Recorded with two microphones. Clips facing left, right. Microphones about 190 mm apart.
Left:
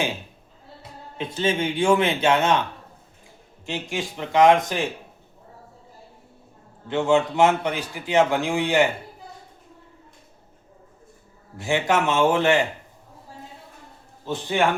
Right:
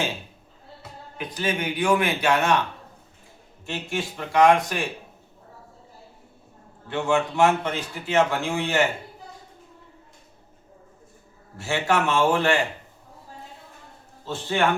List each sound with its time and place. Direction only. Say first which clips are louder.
1.2 s a man's voice: left 4 dB; 25° left (ahead or behind)
3.7 s a man's voice: left 1 dB; 15° left (ahead or behind)
6.8 s a man's voice: left 3 dB; 20° left (ahead or behind)
11.5 s a man's voice: left 2 dB; 15° left (ahead or behind)
14.3 s a man's voice: left 2 dB; 15° left (ahead or behind)